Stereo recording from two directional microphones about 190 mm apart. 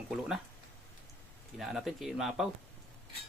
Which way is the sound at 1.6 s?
Centre (ahead or behind).